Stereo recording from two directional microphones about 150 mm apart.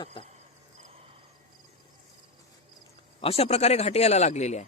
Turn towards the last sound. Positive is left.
turn(degrees=50)  # may be behind; listen again after turning